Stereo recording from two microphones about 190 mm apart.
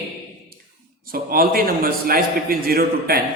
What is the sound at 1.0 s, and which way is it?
A man's voice, 50° right (ahead or behind).